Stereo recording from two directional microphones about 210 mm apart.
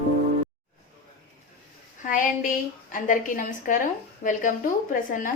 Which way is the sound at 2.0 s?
40° left (ahead or behind).